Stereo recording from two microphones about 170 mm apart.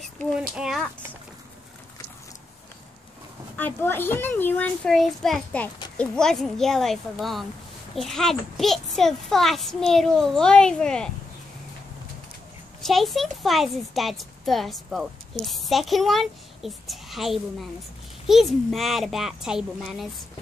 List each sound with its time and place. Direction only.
0.2 s speech: centre (ahead or behind)
3.5 s a child's voice: 10° left (ahead or behind)
12.8 s speech: centre (ahead or behind)